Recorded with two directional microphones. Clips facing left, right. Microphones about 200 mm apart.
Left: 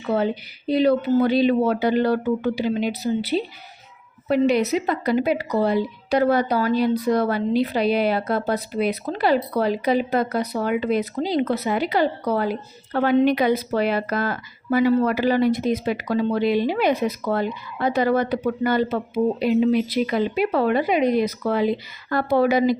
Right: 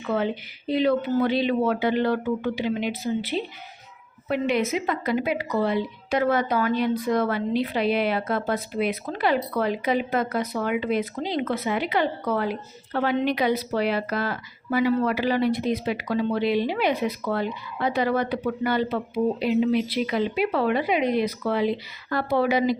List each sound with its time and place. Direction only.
0.7 s a woman's voice: 40° left (ahead or behind)